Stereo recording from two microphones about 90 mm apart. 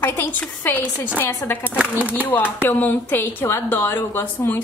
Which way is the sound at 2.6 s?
20° left (ahead or behind).